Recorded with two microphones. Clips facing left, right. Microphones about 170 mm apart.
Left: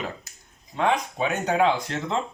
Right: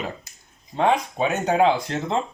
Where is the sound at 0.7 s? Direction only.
30° right (ahead or behind).